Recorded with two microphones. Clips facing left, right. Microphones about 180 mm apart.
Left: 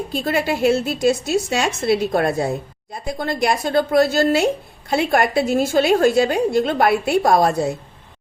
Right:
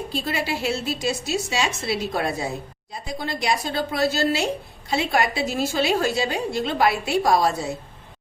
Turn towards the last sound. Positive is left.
turn(degrees=55)  # may be behind; listen again after turning